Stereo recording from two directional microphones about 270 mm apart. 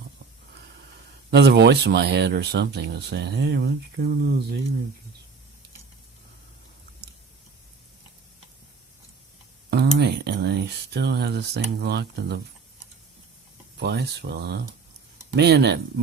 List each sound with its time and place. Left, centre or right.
1.3 s speech: right
9.6 s speech: right
13.7 s speech: right